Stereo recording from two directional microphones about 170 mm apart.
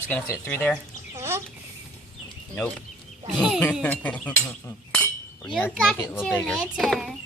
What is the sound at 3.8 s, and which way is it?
Speech, 10° left (ahead or behind).